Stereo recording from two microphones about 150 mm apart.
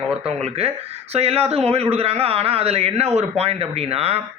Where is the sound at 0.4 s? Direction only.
40° right (ahead or behind).